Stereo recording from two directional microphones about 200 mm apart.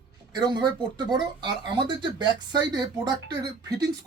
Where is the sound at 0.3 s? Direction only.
20° right (ahead or behind).